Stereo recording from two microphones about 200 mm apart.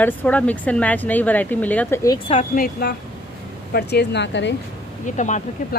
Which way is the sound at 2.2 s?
40° left (ahead or behind).